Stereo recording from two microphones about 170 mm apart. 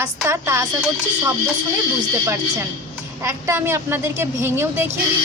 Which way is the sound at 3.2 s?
15° right (ahead or behind).